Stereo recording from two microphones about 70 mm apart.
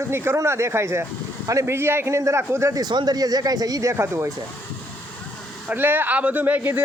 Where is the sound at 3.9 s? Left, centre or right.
Right.